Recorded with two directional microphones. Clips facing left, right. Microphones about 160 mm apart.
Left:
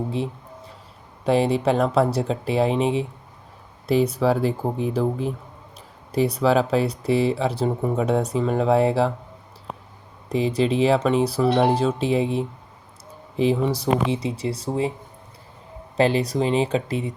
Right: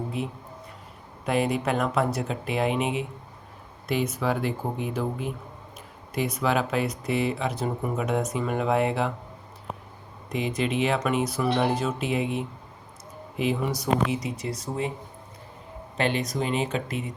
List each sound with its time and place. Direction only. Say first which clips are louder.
1.2 s speech: left 5 dB; 30° left (ahead or behind)
10.2 s speech: left 6 dB; 30° left (ahead or behind)
16.0 s speech: left 6 dB; 35° left (ahead or behind)